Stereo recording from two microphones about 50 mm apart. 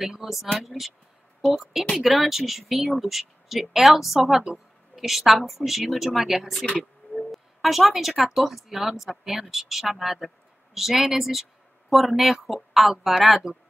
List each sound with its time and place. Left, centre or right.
0.0 s speech: centre